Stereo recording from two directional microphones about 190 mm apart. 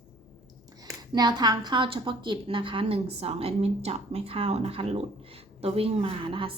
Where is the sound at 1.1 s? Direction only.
20° right (ahead or behind).